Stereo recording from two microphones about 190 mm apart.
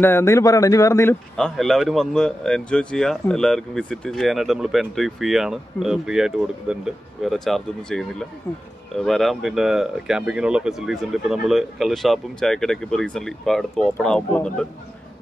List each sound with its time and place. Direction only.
0.0 s speech: 15° left (ahead or behind)
1.3 s speech: centre (ahead or behind)